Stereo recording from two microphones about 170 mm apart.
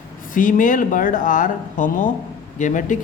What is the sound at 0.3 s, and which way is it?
Speech, 50° left (ahead or behind).